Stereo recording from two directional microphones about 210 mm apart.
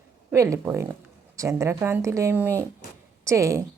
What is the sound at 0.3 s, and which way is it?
Speech, 15° right (ahead or behind).